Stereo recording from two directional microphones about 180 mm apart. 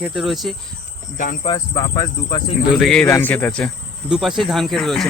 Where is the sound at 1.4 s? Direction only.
20° left (ahead or behind).